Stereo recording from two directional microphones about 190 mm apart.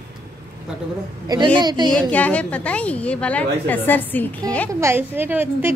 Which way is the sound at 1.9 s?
5° left (ahead or behind).